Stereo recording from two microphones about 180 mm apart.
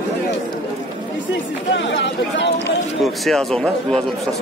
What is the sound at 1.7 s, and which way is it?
Speech, 90° left.